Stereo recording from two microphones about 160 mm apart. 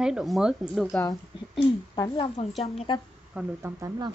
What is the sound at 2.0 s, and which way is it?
A woman's voice, 30° left (ahead or behind).